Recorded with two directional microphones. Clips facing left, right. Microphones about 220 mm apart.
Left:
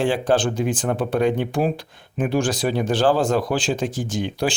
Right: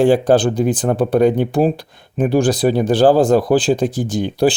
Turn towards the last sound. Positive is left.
turn(degrees=-35)  # may be behind; listen again after turning